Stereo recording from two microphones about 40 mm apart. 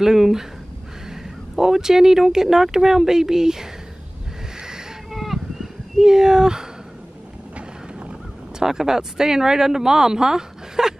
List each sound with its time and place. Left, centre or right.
0.0 s speech: centre
5.1 s sheep: centre
7.5 s vehicle: right
8.5 s speech: centre